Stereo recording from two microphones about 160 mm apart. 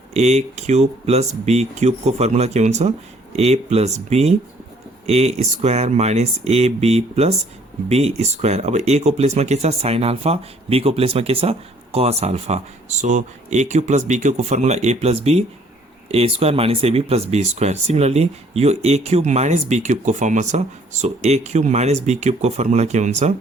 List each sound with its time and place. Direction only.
0.1 s speech: 45° right (ahead or behind)